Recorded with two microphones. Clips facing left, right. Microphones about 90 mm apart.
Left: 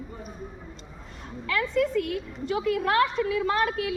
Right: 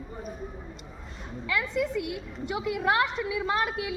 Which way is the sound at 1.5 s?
10° right (ahead or behind).